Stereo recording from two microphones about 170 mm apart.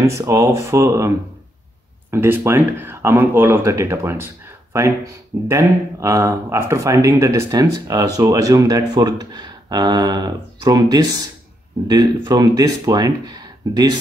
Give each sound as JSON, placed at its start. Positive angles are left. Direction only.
{"t": 0.0, "sound": "speech", "side_deg": -20}